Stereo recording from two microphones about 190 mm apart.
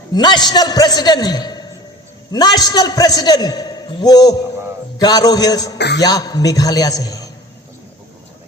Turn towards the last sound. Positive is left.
turn(degrees=20)  # may be behind; listen again after turning